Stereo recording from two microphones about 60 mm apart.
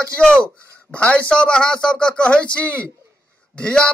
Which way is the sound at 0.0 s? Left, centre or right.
Centre.